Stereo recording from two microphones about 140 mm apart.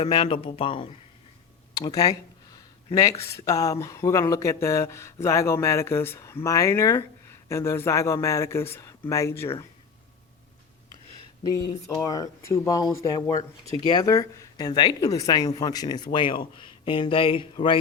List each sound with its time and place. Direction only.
0.0 s speech: 40° left (ahead or behind)
1.7 s speech: 25° left (ahead or behind)
12.0 s speech: 25° left (ahead or behind)